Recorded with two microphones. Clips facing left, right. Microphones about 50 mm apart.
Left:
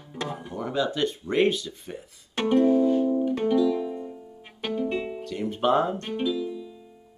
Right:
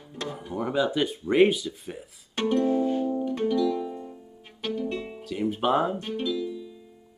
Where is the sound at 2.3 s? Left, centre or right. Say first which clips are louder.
Left 3 dB; centre.